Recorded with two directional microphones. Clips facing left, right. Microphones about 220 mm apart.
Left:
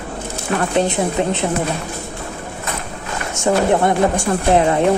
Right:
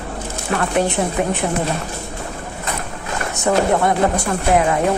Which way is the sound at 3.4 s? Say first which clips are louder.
Left 1 dB; 25° left (ahead or behind).